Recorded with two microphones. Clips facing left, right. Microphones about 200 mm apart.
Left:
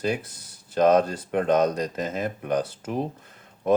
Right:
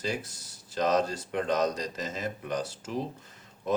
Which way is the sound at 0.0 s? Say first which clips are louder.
Left 6 dB; 55° left (ahead or behind).